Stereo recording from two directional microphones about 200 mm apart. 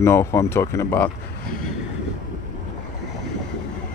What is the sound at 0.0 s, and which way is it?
Speech, 15° left (ahead or behind).